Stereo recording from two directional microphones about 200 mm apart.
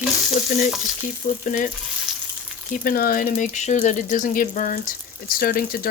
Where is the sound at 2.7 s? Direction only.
45° left (ahead or behind).